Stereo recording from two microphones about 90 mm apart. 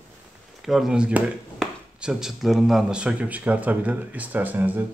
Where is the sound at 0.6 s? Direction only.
5° right (ahead or behind).